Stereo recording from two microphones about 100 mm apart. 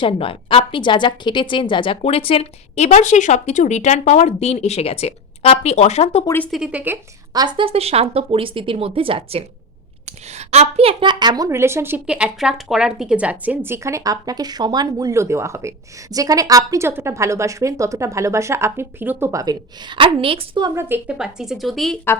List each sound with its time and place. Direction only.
0.0 s a woman's voice: 60° left (ahead or behind); by 2.9 s 80° left
4.2 s speech: 90° left
6.5 s speech: 10° right (ahead or behind)
7.3 s speech: 55° right (ahead or behind)
10.3 s a woman's voice: 90° right
11.0 s a child's voice: 45° right (ahead or behind)
11.4 s speech: 30° right (ahead or behind)
12.0 s speech: 10° right (ahead or behind)
19.3 s a woman's voice: 35° right (ahead or behind)
19.9 s speech: 60° right (ahead or behind)
20.7 s speech: 25° right (ahead or behind)
21.1 s speech: 5° right (ahead or behind)